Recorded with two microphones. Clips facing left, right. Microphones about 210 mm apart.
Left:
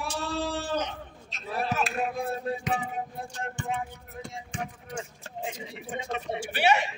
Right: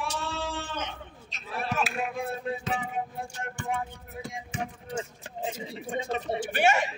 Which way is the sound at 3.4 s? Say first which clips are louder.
Even; 20° left (ahead or behind).